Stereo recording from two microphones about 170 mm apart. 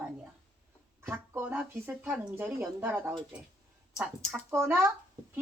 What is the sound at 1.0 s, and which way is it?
Speech, 15° right (ahead or behind).